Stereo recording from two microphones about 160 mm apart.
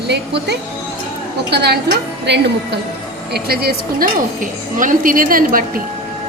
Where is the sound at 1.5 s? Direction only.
90° right.